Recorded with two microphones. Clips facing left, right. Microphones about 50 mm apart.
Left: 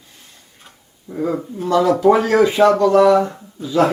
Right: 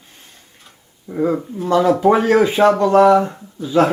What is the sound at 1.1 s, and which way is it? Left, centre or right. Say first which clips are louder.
Speech: right 3 dB; right.